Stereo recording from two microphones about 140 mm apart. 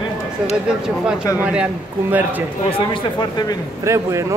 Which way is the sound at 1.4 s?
10° right (ahead or behind).